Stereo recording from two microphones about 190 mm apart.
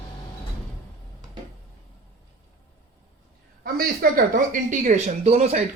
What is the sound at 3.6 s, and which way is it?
Speech, 50° right (ahead or behind).